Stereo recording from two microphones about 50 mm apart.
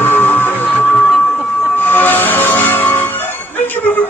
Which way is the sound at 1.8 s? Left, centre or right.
Left.